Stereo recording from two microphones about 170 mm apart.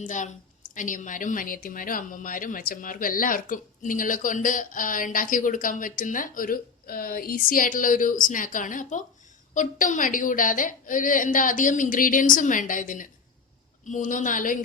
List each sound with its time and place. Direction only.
0.0 s a woman's voice: 45° left (ahead or behind)